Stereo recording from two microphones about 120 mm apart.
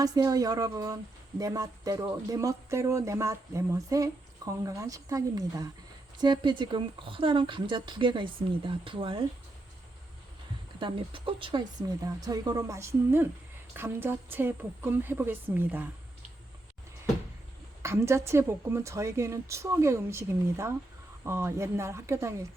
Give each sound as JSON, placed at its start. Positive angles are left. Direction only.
{"t": 0.0, "sound": "speech", "side_deg": -30}
{"t": 10.8, "sound": "a woman's voice", "side_deg": -45}
{"t": 17.8, "sound": "speech", "side_deg": -20}